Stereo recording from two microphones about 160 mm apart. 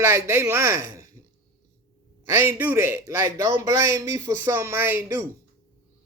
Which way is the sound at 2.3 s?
15° right (ahead or behind).